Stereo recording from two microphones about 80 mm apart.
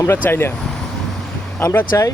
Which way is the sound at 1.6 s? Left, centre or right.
Left.